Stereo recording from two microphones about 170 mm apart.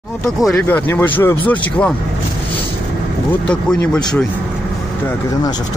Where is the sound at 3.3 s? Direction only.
5° left (ahead or behind).